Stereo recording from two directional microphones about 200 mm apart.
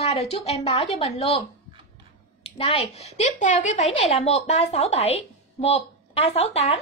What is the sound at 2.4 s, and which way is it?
A woman's voice, 30° left (ahead or behind).